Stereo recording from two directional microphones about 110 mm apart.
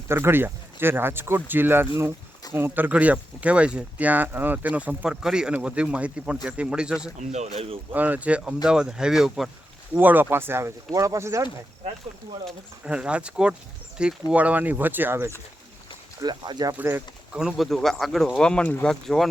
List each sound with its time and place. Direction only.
0.1 s speech: 20° right (ahead or behind)
7.2 s speech: 85° right; by 7.8 s 70° right (ahead or behind)
7.9 s speech: 15° right (ahead or behind)
9.9 s speech: 15° right (ahead or behind)
12.8 s speech: 10° right (ahead or behind)
16.2 s speech: 40° right (ahead or behind)
16.7 s speech: 20° right (ahead or behind)
17.3 s speech: 5° right (ahead or behind)